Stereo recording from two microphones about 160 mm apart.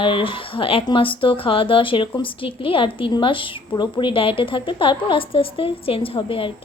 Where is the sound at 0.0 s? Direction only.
35° left (ahead or behind).